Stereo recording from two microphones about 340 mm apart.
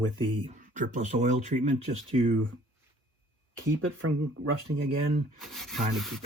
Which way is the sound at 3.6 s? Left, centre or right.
Right.